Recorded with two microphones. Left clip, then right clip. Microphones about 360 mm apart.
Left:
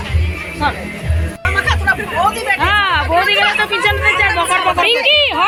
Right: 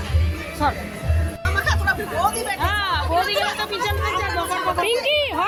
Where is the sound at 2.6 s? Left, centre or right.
Right.